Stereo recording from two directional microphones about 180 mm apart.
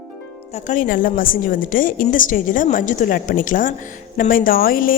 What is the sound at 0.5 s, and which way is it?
A woman's voice, 45° left (ahead or behind).